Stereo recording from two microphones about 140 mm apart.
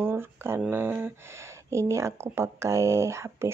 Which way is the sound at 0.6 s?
15° right (ahead or behind).